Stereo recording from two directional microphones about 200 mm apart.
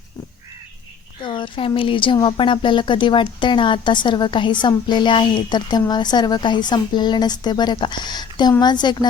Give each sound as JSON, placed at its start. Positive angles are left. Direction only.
{"t": 1.2, "sound": "speech", "side_deg": 25}